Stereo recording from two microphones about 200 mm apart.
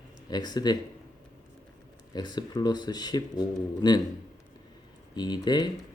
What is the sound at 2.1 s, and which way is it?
Speech, 20° left (ahead or behind).